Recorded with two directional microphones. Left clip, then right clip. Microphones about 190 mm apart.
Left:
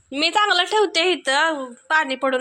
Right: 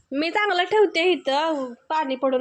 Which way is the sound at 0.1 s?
35° right (ahead or behind).